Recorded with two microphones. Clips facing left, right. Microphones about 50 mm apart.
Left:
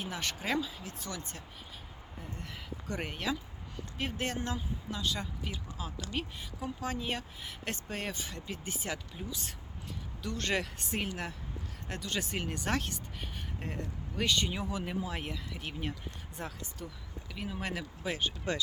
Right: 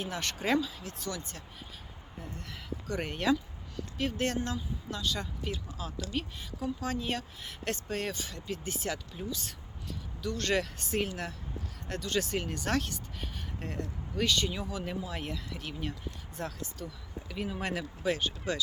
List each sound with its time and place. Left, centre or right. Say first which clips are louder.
0.0 s speech: right 3 dB; centre
2.2 s speech: even; centre
3.1 s speech: right 8 dB; centre
3.9 s speech: right 4 dB; centre
4.4 s speech: right 2 dB; left
4.9 s speech: right 1 dB; centre
10.2 s speech: right 3 dB; left
17.2 s speech: right 3 dB; centre